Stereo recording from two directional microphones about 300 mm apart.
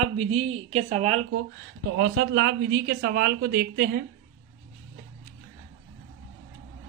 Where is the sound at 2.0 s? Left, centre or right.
Right.